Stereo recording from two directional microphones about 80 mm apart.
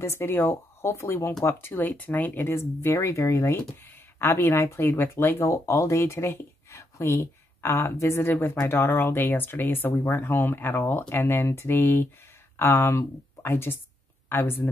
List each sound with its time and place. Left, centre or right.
0.0 s speech: left